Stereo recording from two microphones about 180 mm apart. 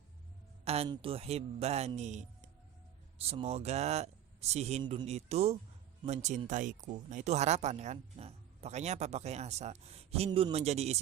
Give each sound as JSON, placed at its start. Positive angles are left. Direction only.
{"t": 0.6, "sound": "speech", "side_deg": -35}
{"t": 4.8, "sound": "speech", "side_deg": -25}
{"t": 5.0, "sound": "speech", "side_deg": -35}